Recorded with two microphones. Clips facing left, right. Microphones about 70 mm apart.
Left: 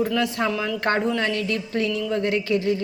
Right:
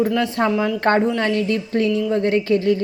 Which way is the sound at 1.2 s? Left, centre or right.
Right.